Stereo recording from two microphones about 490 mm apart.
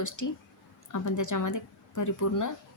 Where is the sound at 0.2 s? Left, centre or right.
Left.